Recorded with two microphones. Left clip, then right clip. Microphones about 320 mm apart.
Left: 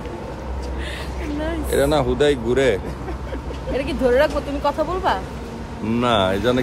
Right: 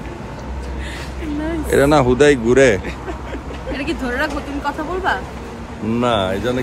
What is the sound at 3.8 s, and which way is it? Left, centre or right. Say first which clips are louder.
Speech: left 5 dB; centre.